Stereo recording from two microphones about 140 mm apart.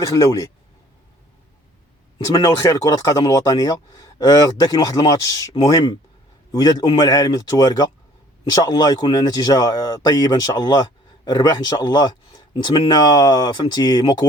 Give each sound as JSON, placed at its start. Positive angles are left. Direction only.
{"t": 0.2, "sound": "speech", "side_deg": 25}
{"t": 2.1, "sound": "speech", "side_deg": 25}